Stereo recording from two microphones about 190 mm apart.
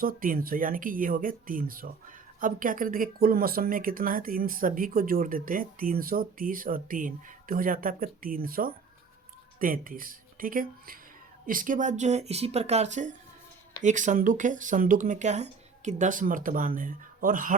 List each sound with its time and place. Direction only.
0.0 s speech: 50° right (ahead or behind)